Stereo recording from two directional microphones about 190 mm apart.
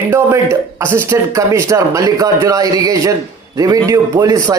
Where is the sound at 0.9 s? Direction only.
15° right (ahead or behind).